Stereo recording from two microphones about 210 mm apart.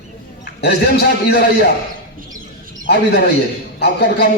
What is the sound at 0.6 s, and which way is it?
A man's voice, 50° left (ahead or behind).